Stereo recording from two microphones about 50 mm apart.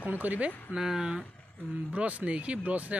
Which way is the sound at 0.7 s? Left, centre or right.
Centre.